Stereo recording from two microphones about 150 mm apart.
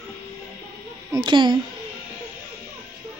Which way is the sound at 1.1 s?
30° right (ahead or behind).